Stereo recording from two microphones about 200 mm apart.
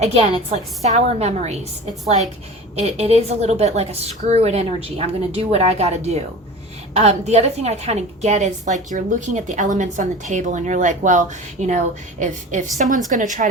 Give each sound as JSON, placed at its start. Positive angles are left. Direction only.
{"t": 0.0, "sound": "a woman's voice", "side_deg": -30}
{"t": 2.7, "sound": "a woman's voice", "side_deg": -30}